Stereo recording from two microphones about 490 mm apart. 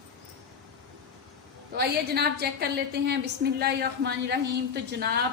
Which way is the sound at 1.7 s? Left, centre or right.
Centre.